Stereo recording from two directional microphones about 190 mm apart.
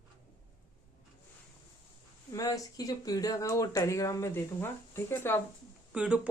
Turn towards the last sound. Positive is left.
turn(degrees=-5)  # may be behind; listen again after turning